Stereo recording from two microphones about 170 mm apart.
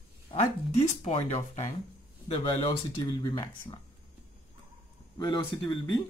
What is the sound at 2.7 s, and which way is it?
Speech, 30° left (ahead or behind).